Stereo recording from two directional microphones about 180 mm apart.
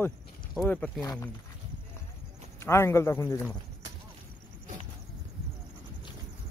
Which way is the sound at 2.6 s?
15° left (ahead or behind).